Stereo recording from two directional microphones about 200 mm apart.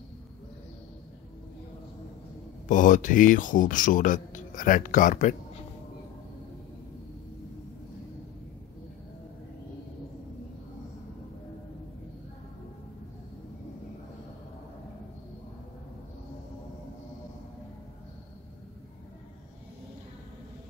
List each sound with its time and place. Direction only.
2.7 s speech: 40° left (ahead or behind)